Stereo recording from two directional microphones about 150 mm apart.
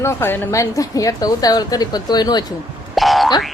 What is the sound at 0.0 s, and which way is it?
A woman's voice, 15° left (ahead or behind).